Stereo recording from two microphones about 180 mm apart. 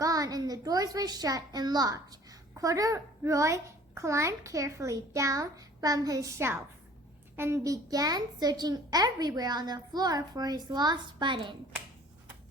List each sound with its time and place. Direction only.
0.0 s a woman's voice: 20° right (ahead or behind)